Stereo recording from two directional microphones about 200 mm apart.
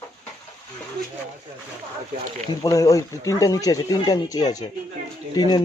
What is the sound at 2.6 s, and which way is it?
Speech, 15° left (ahead or behind).